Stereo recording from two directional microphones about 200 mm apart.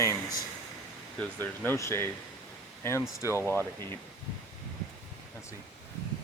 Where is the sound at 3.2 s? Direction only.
15° left (ahead or behind).